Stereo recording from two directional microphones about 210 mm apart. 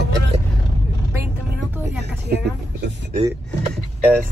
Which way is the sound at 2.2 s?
50° right (ahead or behind).